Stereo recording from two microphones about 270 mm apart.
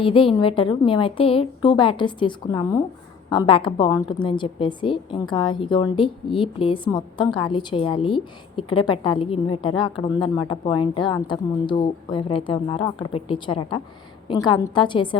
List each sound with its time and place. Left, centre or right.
0.0 s a woman's voice: centre